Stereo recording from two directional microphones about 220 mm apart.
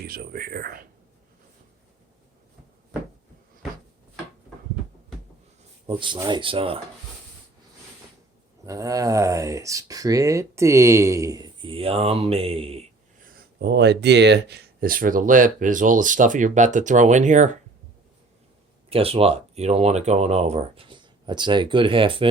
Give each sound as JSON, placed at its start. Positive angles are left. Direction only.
{"t": 0.1, "sound": "speech", "side_deg": -40}
{"t": 5.8, "sound": "speech", "side_deg": -20}
{"t": 8.6, "sound": "speech", "side_deg": -15}
{"t": 13.2, "sound": "speech", "side_deg": -45}
{"t": 18.9, "sound": "speech", "side_deg": -25}